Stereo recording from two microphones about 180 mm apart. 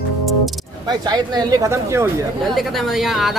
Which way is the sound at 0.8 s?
20° right (ahead or behind).